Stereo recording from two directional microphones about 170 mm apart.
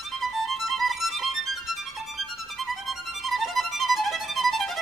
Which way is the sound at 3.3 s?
Centre (ahead or behind).